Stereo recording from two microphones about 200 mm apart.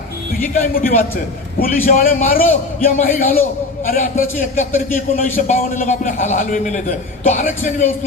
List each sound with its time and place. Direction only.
0.5 s a man's voice: 45° left (ahead or behind)